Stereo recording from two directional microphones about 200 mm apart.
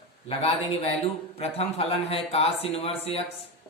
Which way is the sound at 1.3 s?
30° left (ahead or behind).